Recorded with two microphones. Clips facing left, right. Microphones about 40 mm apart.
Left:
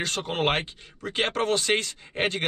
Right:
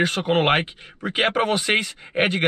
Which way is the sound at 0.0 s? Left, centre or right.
Right.